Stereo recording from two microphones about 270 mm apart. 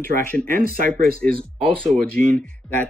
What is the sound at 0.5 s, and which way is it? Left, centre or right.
Speech, right.